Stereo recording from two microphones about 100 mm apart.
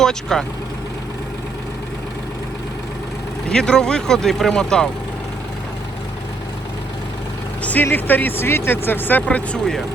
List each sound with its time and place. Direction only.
0.0 s speech: 5° left (ahead or behind)
3.5 s speech: 5° left (ahead or behind)
7.6 s speech: 15° left (ahead or behind)